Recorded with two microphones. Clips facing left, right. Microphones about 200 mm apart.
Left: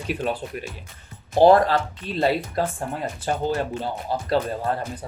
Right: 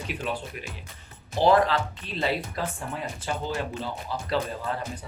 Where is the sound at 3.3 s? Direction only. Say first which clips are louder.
Left 6 dB; 50° left (ahead or behind).